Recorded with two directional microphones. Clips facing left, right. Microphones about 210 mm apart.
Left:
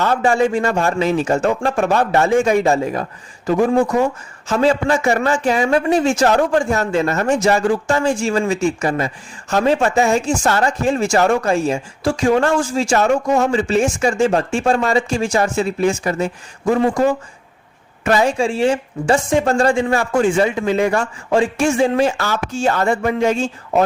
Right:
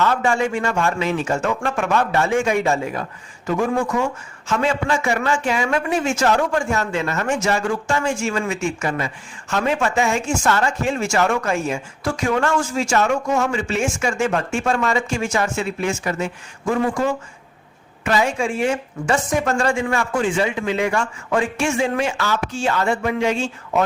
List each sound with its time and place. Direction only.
0.0 s a man's voice: 35° left (ahead or behind)